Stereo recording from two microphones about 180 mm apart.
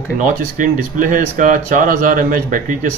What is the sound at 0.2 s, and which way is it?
Speech, 50° right (ahead or behind).